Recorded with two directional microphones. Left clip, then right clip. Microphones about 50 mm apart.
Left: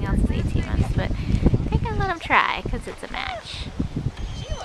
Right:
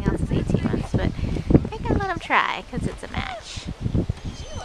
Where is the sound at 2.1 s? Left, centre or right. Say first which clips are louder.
Left 3 dB; centre.